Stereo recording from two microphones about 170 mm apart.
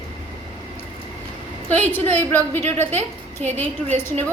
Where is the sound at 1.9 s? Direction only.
10° left (ahead or behind).